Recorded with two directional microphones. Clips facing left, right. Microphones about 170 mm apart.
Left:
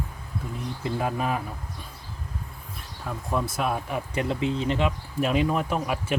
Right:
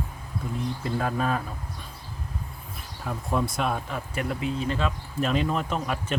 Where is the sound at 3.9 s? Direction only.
20° left (ahead or behind).